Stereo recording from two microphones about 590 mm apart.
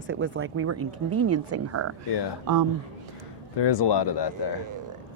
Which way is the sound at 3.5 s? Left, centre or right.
Left.